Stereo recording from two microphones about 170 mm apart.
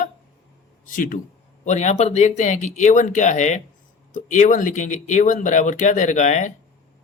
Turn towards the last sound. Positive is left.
turn(degrees=45)  # may be behind; listen again after turning